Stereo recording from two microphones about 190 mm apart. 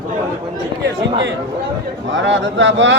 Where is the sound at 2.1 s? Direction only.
75° right (ahead or behind).